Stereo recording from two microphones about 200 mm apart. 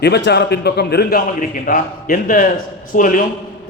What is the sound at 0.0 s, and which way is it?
A man's voice, 55° left (ahead or behind).